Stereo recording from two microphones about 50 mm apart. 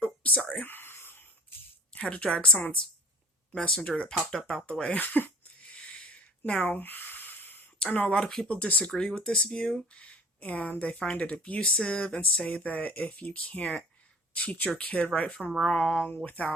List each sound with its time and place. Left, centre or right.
0.0 s whispering: left
0.5 s a sound: left
1.9 s speech: left
3.8 s speech: left
4.3 s speech: centre
4.9 s a sound: left
6.7 s a sound: left
7.8 s speech: left
8.4 s speech: left; by 9.8 s centre
9.9 s speech: left
15.4 s speech: centre
15.9 s speech: left